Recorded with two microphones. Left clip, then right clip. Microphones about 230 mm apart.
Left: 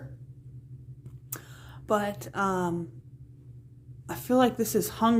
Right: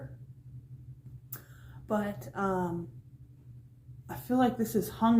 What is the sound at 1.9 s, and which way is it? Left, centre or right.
Speech, left.